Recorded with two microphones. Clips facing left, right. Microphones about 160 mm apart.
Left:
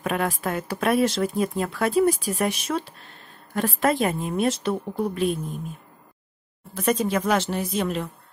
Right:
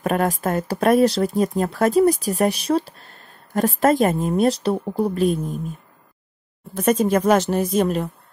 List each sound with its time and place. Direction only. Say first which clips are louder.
0.0 s speech: right 5 dB; 40° right (ahead or behind)
6.7 s speech: right 5 dB; 45° right (ahead or behind)